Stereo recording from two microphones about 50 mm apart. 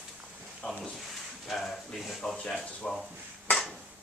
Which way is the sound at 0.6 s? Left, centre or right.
Centre.